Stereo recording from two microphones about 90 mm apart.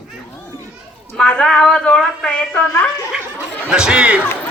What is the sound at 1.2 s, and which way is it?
Speech, 10° left (ahead or behind).